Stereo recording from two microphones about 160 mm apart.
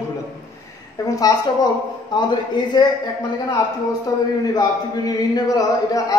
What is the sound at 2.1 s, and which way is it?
Speech, 30° left (ahead or behind).